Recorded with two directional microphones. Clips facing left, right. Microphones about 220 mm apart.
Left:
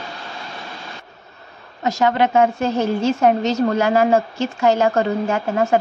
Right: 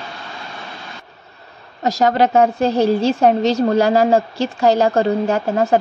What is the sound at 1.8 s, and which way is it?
A woman's voice, 35° right (ahead or behind).